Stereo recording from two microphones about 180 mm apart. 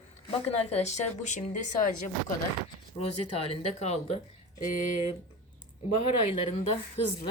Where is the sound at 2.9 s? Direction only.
35° left (ahead or behind).